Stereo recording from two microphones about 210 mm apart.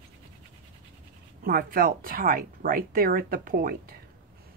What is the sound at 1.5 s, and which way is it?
Speech, 45° right (ahead or behind).